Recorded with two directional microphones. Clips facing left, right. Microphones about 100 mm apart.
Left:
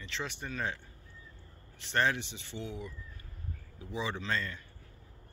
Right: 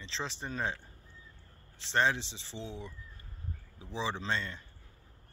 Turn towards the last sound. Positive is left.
turn(degrees=-25)  # may be behind; listen again after turning